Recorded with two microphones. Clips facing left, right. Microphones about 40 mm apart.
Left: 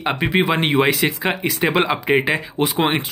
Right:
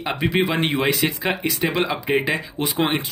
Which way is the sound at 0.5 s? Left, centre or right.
Left.